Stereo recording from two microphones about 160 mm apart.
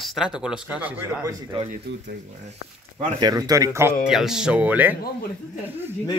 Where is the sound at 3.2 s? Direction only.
25° right (ahead or behind).